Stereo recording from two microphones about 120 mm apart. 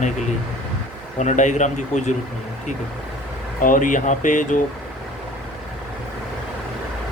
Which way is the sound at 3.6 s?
90° left.